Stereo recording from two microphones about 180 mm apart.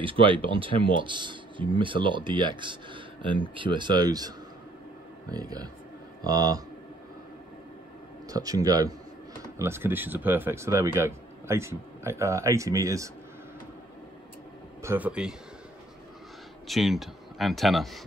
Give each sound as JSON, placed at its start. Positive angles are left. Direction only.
{"t": 0.0, "sound": "speech", "side_deg": -30}
{"t": 5.3, "sound": "speech", "side_deg": -20}
{"t": 8.3, "sound": "speech", "side_deg": -20}
{"t": 14.8, "sound": "speech", "side_deg": -10}
{"t": 16.6, "sound": "speech", "side_deg": 0}